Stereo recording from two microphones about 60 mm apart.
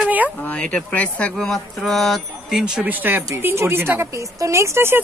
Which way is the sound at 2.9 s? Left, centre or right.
Right.